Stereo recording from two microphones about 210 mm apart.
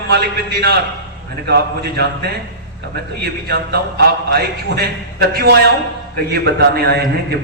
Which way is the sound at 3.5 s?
50° right (ahead or behind).